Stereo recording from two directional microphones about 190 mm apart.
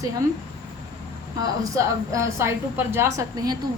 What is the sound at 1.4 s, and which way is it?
A woman's voice, 15° right (ahead or behind).